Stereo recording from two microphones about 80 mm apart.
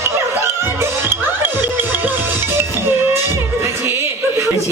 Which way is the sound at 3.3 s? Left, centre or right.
Right.